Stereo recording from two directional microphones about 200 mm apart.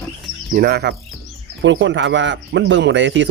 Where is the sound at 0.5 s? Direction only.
50° right (ahead or behind).